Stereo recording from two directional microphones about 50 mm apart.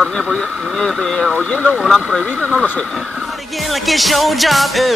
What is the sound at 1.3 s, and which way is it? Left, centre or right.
Speech, left.